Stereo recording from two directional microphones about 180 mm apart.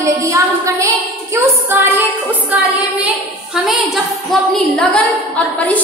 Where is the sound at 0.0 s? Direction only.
20° right (ahead or behind); by 5.0 s centre (ahead or behind).